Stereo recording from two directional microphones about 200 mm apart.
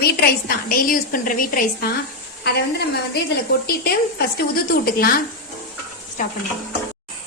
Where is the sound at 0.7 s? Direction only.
45° left (ahead or behind).